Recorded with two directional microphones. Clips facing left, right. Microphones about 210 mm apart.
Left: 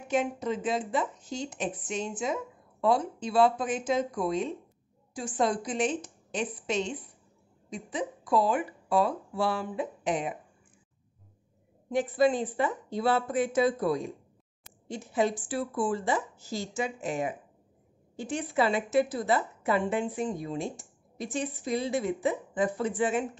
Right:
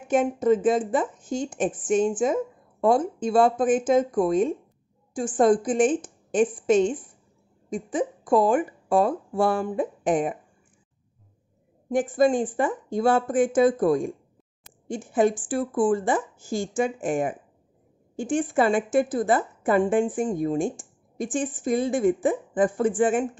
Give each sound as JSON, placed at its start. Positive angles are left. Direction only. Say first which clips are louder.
{"t": 0.1, "sound": "a woman's voice", "louder": "right 8 dB", "side_deg": -50}
{"t": 11.9, "sound": "a woman's voice", "louder": "right 4 dB", "side_deg": -45}